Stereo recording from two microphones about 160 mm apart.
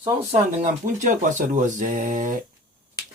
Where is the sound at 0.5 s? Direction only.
50° right (ahead or behind).